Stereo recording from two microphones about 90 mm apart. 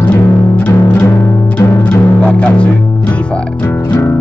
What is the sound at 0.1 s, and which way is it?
Music, 15° left (ahead or behind).